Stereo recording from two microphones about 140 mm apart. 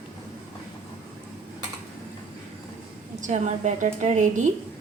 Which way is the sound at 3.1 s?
60° right (ahead or behind).